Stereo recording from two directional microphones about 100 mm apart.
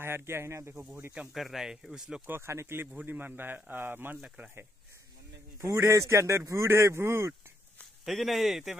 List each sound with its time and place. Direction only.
0.0 s a man's voice: 25° right (ahead or behind)
1.1 s speech: 10° right (ahead or behind)
2.2 s a man's voice: 25° right (ahead or behind)
5.6 s a man's voice: 30° right (ahead or behind)
8.0 s speech: centre (ahead or behind)